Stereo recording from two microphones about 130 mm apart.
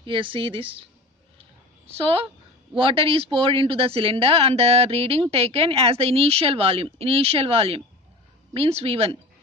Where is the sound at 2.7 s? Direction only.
45° right (ahead or behind).